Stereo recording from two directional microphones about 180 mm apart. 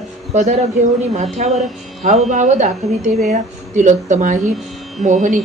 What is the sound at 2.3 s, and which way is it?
A woman's voice, 45° right (ahead or behind).